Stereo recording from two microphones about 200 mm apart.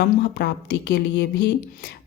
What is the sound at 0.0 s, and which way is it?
A woman's voice, 55° left (ahead or behind).